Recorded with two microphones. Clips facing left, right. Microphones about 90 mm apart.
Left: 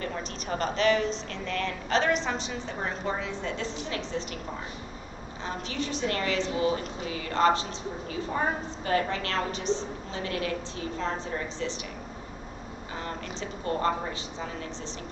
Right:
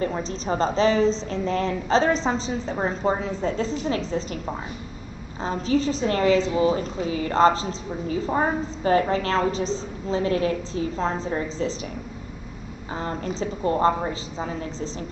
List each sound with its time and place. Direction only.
0.0 s a woman's voice: 25° right (ahead or behind)
5.4 s a woman's voice: 35° right (ahead or behind)
12.9 s a woman's voice: 30° right (ahead or behind)